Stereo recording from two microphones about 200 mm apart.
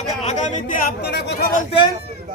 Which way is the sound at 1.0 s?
55° left (ahead or behind).